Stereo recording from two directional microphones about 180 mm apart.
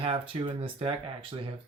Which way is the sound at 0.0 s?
30° right (ahead or behind).